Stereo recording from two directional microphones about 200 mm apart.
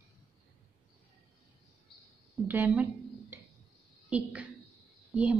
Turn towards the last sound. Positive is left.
turn(degrees=-5)  # may be behind; listen again after turning